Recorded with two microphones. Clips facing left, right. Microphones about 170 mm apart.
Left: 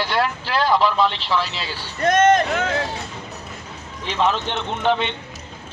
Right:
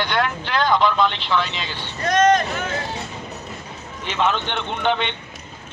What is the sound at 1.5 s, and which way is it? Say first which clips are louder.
Speech: even; 35° left (ahead or behind).